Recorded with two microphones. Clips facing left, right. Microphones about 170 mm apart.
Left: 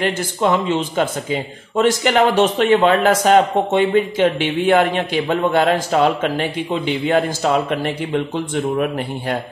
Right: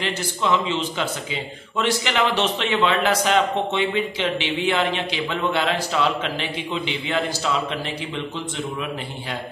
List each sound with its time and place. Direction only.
0.0 s speech: 50° left (ahead or behind)